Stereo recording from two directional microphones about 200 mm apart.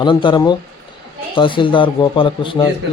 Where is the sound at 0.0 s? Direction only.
25° left (ahead or behind).